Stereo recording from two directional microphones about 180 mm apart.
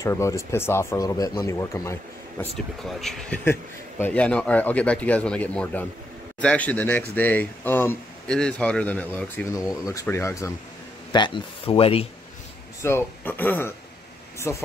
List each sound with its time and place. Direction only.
0.0 s speech: 15° left (ahead or behind)
2.5 s speech: centre (ahead or behind); by 12.1 s 30° left (ahead or behind)
12.8 s speech: 15° left (ahead or behind)